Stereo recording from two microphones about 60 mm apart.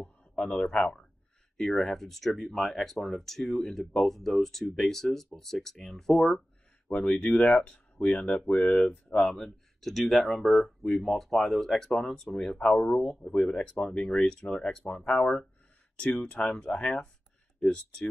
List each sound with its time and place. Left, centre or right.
0.4 s speech: centre
6.9 s speech: centre
9.2 s speech: centre